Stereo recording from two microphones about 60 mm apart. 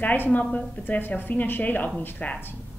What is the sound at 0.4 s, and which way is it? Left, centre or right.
Speech, centre.